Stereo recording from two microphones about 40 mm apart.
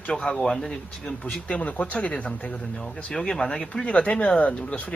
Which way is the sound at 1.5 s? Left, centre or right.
Left.